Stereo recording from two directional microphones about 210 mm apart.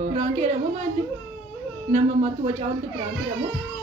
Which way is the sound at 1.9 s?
35° right (ahead or behind).